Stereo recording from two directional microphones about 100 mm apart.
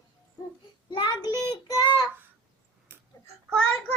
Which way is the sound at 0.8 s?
50° left (ahead or behind).